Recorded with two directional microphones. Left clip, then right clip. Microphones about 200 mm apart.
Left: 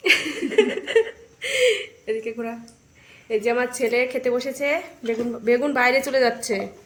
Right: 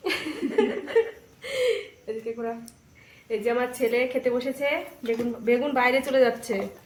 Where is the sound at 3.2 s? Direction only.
45° left (ahead or behind).